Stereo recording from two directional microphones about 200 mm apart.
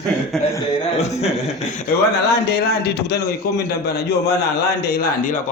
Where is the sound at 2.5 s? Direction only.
50° left (ahead or behind).